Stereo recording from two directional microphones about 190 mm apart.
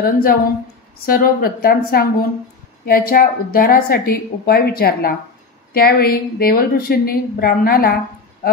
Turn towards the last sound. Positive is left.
turn(degrees=50)  # may be behind; listen again after turning